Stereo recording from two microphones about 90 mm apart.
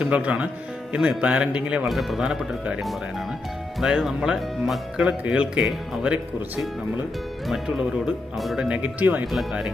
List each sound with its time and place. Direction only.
0.0 s speech: 15° right (ahead or behind)
1.9 s speech: centre (ahead or behind)
5.0 s speech: 15° right (ahead or behind)
8.4 s speech: centre (ahead or behind); by 9.2 s 20° right (ahead or behind)
9.3 s speech: 5° right (ahead or behind)